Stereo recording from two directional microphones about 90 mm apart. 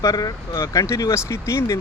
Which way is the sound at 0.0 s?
45° left (ahead or behind).